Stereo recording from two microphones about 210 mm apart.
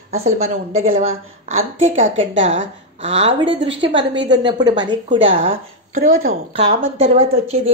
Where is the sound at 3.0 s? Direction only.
30° right (ahead or behind).